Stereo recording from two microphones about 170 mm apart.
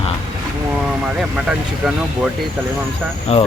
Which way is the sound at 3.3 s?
40° left (ahead or behind).